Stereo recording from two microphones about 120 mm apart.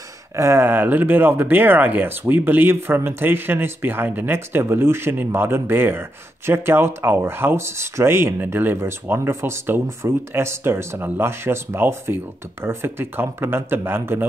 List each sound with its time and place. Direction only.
0.4 s speech: 20° right (ahead or behind)